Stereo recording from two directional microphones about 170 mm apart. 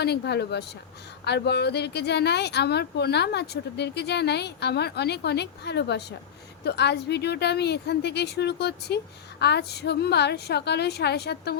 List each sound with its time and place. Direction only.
0.0 s a woman's voice: 75° left (ahead or behind)